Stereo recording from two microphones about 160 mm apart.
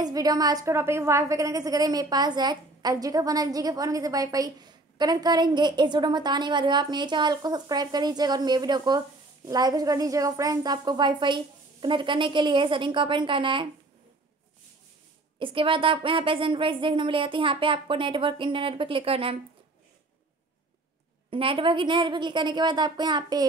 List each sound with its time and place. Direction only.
0.0 s a woman's voice: 25° right (ahead or behind)
15.3 s a woman's voice: 30° right (ahead or behind)
21.3 s a woman's voice: 35° right (ahead or behind)